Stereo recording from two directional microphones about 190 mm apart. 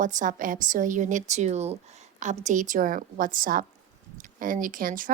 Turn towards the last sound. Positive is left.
turn(degrees=-45)  # may be behind; listen again after turning